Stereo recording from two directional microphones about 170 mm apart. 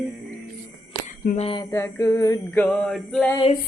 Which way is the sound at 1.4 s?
30° left (ahead or behind).